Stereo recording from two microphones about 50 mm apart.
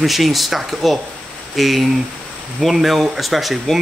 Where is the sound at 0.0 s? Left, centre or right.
Centre.